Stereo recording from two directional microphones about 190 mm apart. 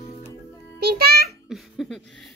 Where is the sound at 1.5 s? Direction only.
Centre (ahead or behind).